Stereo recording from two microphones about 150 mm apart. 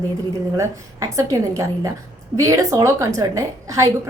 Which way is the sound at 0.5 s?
20° right (ahead or behind).